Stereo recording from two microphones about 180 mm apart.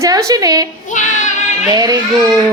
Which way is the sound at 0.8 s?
45° left (ahead or behind).